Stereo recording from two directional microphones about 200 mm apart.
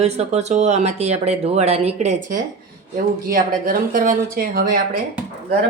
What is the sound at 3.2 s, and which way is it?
Speech, 45° right (ahead or behind).